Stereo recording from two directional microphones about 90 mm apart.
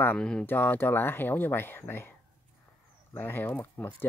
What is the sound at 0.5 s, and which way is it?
Speech, 25° left (ahead or behind).